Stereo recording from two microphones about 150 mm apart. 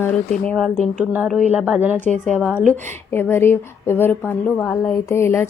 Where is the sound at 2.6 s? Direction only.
15° left (ahead or behind).